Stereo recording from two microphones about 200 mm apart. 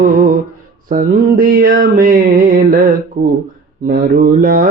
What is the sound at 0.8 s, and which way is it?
Mantra, 40° right (ahead or behind).